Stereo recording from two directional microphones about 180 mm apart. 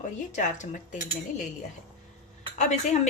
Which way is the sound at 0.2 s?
45° left (ahead or behind).